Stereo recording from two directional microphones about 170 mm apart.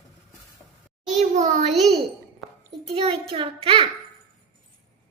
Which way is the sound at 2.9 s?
35° right (ahead or behind).